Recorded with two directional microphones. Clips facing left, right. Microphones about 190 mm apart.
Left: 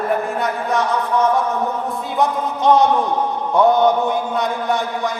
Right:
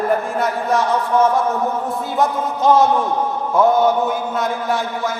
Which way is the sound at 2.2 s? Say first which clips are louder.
Even; centre (ahead or behind).